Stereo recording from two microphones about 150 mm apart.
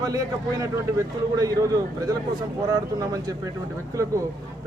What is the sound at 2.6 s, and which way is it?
Speech, 25° right (ahead or behind).